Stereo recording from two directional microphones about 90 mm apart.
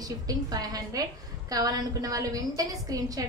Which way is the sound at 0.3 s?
45° right (ahead or behind).